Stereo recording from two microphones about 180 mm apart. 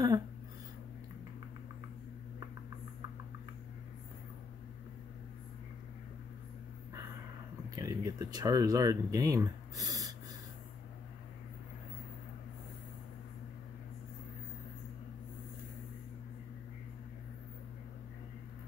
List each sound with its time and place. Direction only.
7.7 s speech: 20° right (ahead or behind)